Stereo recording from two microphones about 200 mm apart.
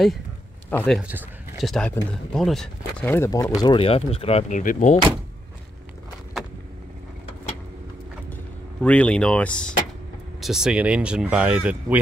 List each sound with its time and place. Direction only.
0.7 s speech: 5° left (ahead or behind)
3.6 s speech: 30° left (ahead or behind)
8.8 s speech: 5° left (ahead or behind)